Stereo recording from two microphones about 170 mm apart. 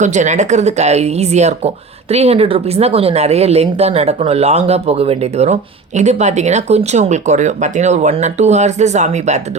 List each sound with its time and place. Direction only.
0.0 s speech: 45° right (ahead or behind)